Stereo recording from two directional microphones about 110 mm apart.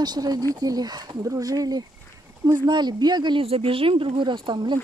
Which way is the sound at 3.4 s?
60° right (ahead or behind).